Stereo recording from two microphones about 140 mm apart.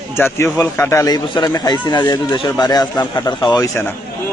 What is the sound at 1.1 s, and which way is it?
A man's voice, 30° left (ahead or behind).